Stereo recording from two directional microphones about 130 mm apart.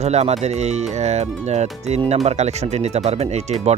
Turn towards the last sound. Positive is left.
turn(degrees=-60)  # may be behind; listen again after turning